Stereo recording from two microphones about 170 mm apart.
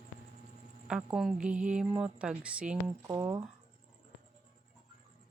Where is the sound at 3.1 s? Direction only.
15° right (ahead or behind).